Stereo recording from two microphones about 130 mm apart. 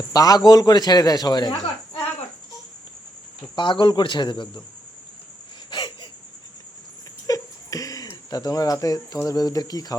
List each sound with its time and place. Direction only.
0.1 s a man's voice: 30° left (ahead or behind)
3.5 s a man's voice: 35° left (ahead or behind)
5.7 s cricket: 35° left (ahead or behind)
7.3 s a sound: 25° left (ahead or behind)
9.2 s speech: 30° left (ahead or behind)